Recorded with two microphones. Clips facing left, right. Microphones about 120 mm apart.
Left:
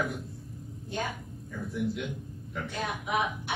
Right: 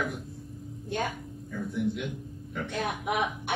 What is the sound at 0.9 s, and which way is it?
Speech, 60° right (ahead or behind).